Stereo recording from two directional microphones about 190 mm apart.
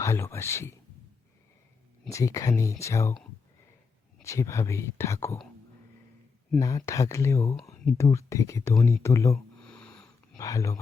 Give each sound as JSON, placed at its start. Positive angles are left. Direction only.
{"t": 0.0, "sound": "speech", "side_deg": 15}
{"t": 2.0, "sound": "speech", "side_deg": 15}
{"t": 4.2, "sound": "speech", "side_deg": 15}
{"t": 6.6, "sound": "speech", "side_deg": 15}
{"t": 9.6, "sound": "a sound", "side_deg": 5}
{"t": 10.3, "sound": "speech", "side_deg": 15}